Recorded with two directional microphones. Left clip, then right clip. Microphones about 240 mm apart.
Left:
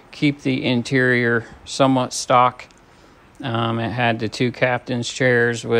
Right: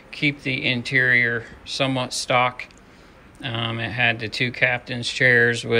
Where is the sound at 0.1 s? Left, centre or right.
Centre.